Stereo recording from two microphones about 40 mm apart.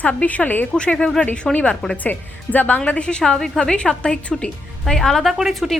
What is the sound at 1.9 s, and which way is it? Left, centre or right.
Speech, left.